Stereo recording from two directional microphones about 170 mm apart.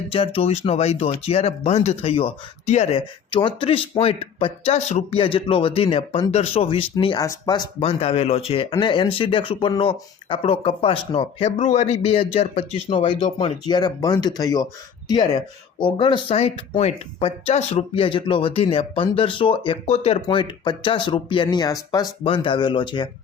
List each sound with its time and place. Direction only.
0.1 s speech: 35° left (ahead or behind)
6.9 s speech: 25° left (ahead or behind)
20.2 s speech: 25° left (ahead or behind)